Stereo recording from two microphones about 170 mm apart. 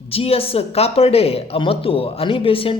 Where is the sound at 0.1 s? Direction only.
35° left (ahead or behind).